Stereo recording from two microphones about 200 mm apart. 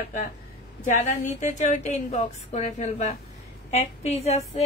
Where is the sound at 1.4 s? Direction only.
35° left (ahead or behind).